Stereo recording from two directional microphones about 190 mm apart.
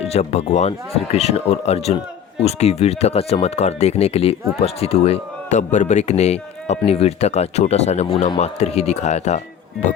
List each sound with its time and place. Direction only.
0.0 s speech: 35° left (ahead or behind)